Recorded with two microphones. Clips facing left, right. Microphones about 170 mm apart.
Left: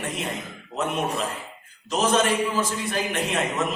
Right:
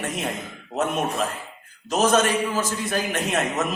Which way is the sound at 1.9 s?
45° right (ahead or behind).